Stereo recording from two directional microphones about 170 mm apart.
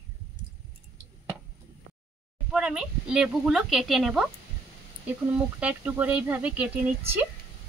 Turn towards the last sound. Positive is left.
turn(degrees=-10)  # may be behind; listen again after turning